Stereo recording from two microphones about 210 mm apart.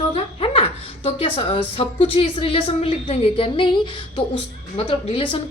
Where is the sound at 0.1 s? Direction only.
25° left (ahead or behind).